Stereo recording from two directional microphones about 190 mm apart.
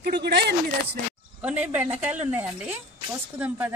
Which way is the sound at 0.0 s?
60° right (ahead or behind).